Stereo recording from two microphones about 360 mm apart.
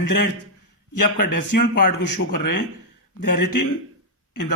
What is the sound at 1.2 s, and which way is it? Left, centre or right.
Speech, left.